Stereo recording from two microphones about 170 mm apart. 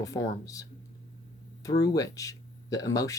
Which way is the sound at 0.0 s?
20° left (ahead or behind).